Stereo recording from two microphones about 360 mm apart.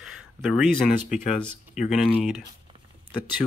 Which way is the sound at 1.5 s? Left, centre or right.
Centre.